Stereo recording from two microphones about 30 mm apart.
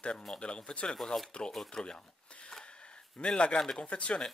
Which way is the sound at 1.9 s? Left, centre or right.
Left.